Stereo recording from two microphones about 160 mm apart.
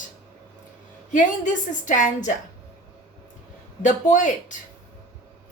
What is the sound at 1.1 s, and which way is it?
Speech, 50° left (ahead or behind).